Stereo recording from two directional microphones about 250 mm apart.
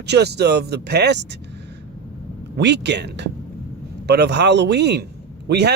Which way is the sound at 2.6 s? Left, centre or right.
Right.